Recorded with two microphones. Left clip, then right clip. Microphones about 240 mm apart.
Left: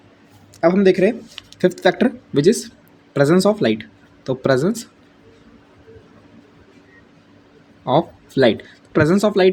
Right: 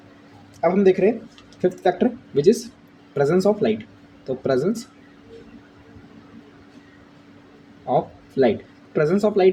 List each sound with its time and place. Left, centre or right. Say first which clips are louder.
0.6 s speech: left 3 dB; left
7.9 s speech: left 4 dB; left